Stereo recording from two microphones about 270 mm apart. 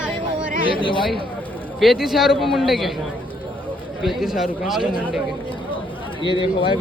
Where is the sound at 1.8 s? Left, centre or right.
Centre.